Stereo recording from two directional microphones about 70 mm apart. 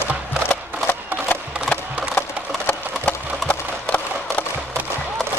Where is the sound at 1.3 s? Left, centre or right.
Left.